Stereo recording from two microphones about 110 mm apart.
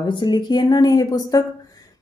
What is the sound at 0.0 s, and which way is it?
Speech, 45° left (ahead or behind).